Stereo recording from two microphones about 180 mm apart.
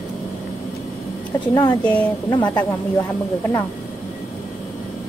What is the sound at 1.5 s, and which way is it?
Speech, 20° left (ahead or behind).